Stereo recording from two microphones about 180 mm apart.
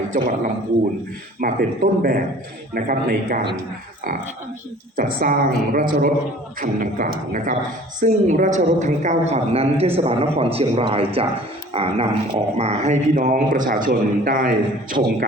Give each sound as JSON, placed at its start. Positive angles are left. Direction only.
{"t": 1.4, "sound": "speech", "side_deg": -50}
{"t": 4.9, "sound": "a man's voice", "side_deg": -50}